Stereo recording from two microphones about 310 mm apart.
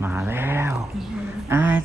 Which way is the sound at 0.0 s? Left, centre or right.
Centre.